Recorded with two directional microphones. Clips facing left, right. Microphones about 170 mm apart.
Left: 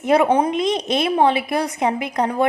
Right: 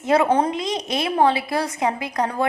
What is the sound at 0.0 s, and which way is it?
A woman's voice, 20° left (ahead or behind).